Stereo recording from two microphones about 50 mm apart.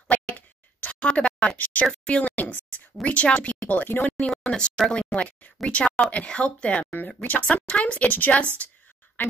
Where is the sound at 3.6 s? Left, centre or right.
Left.